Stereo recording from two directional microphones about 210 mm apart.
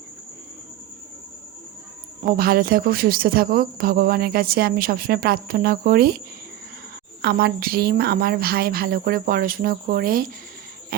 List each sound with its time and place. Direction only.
2.2 s speech: 45° right (ahead or behind)
7.2 s speech: 50° right (ahead or behind)